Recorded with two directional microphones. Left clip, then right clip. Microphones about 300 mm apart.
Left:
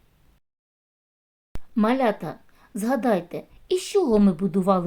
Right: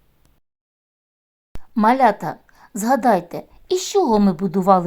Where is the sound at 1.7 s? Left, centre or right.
Centre.